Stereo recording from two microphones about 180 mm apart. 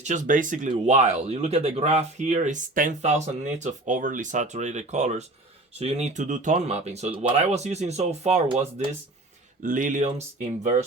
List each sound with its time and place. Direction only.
0.0 s speech: 45° right (ahead or behind)
9.6 s speech: 45° right (ahead or behind)